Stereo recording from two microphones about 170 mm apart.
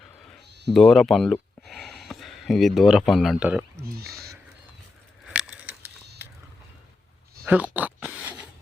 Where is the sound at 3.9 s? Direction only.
65° right (ahead or behind).